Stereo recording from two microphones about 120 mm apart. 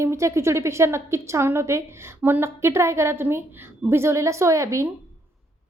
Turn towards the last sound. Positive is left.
turn(degrees=-25)  # may be behind; listen again after turning